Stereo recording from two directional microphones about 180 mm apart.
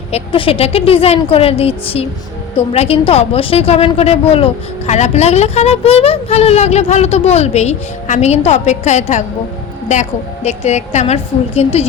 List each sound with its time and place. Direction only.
0.1 s a woman's voice: 30° left (ahead or behind)